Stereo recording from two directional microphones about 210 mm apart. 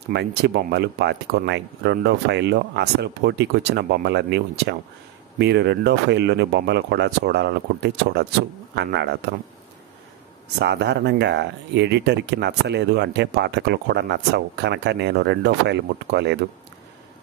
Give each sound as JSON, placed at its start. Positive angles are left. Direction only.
{"t": 0.1, "sound": "speech", "side_deg": -50}
{"t": 10.6, "sound": "speech", "side_deg": -55}